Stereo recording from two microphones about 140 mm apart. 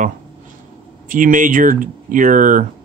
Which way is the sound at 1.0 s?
75° right (ahead or behind).